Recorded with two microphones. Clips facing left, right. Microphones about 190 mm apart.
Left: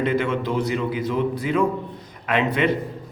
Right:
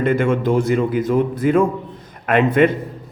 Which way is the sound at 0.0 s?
50° right (ahead or behind).